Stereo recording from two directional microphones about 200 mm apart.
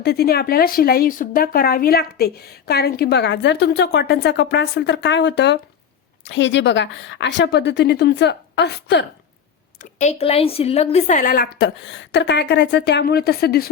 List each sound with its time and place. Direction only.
0.0 s a woman's voice: 55° left (ahead or behind)
9.7 s speech: 35° left (ahead or behind); by 13.7 s 50° left (ahead or behind)